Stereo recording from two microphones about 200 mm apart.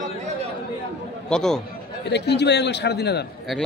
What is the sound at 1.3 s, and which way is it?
Speech, 5° left (ahead or behind).